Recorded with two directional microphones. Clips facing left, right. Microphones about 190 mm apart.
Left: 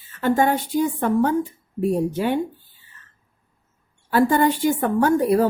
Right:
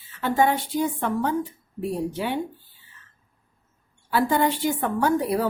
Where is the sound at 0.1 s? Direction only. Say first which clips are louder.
Left 3 dB; 50° left (ahead or behind).